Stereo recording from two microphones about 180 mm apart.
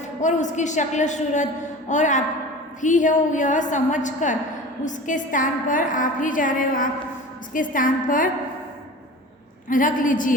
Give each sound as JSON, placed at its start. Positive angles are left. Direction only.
{"t": 0.2, "sound": "a woman's voice", "side_deg": 40}
{"t": 9.6, "sound": "a woman's voice", "side_deg": 45}